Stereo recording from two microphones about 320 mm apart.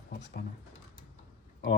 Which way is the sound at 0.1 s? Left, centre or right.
Left.